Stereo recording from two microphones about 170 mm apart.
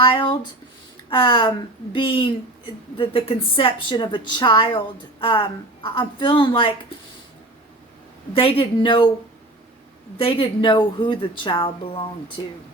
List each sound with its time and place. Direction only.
0.0 s a woman's voice: 30° left (ahead or behind)
8.3 s a woman's voice: 30° left (ahead or behind)
10.2 s a woman's voice: 30° left (ahead or behind)